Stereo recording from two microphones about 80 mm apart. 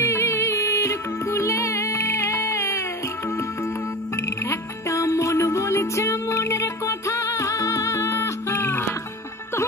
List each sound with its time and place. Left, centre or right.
0.0 s music: left
4.2 s music: left